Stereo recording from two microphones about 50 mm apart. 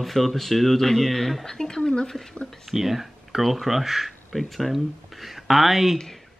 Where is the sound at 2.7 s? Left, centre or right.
Centre.